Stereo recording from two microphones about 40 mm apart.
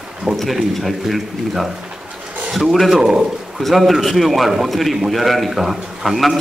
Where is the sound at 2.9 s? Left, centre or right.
Centre.